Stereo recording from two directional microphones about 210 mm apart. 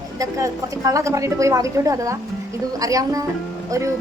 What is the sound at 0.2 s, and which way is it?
A woman's voice, 15° right (ahead or behind).